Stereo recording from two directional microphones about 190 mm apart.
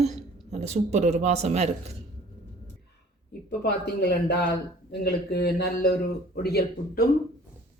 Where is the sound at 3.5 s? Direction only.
60° left (ahead or behind).